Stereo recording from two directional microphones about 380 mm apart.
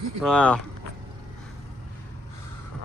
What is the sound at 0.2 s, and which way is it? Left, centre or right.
Speech, centre.